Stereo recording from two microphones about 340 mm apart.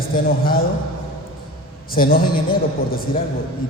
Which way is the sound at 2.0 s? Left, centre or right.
Left.